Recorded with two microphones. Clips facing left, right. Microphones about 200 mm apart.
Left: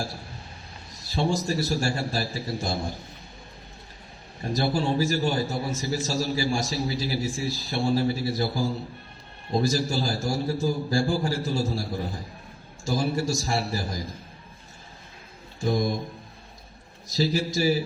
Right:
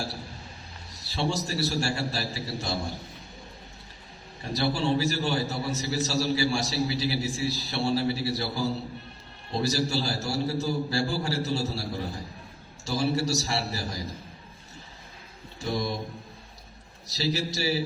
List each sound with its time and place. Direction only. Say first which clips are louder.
1.1 s a man's voice: left 4 dB; 50° left (ahead or behind)
4.5 s a man's voice: left 1 dB; 50° left (ahead or behind)
15.6 s a man's voice: left 5 dB; 50° left (ahead or behind)
17.2 s a man's voice: left 5 dB; 50° left (ahead or behind)